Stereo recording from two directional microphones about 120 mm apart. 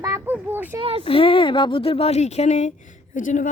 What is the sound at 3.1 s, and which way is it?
Speech, 90° left.